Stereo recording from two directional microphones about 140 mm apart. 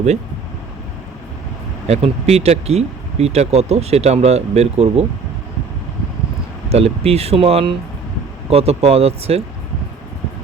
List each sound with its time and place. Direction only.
1.9 s speech: 50° right (ahead or behind)
6.7 s speech: 45° right (ahead or behind)